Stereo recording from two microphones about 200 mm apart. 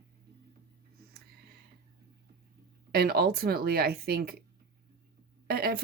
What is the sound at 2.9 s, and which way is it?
Speech, 50° right (ahead or behind).